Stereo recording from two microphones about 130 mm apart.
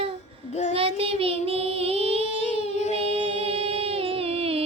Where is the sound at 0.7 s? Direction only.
45° right (ahead or behind).